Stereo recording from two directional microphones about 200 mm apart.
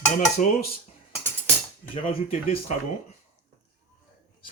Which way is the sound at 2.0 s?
30° left (ahead or behind).